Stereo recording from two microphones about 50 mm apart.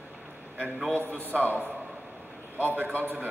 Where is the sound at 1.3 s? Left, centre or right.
Right.